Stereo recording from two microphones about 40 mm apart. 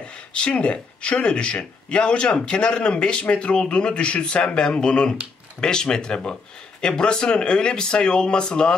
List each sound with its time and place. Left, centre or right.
0.3 s speech: left